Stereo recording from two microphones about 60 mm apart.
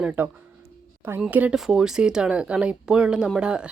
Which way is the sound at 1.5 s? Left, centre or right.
Centre.